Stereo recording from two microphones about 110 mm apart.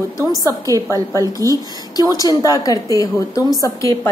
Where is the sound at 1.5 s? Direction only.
35° left (ahead or behind).